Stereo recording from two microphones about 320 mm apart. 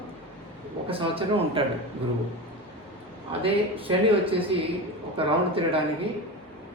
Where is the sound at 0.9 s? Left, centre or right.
Centre.